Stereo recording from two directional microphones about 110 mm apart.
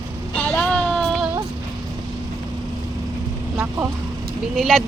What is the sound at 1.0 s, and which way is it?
Music, 5° right (ahead or behind).